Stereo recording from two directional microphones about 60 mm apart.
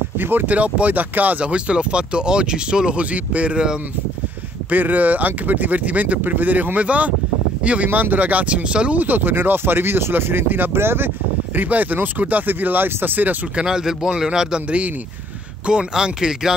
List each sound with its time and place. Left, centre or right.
0.2 s speech: right
13.6 s a man's voice: centre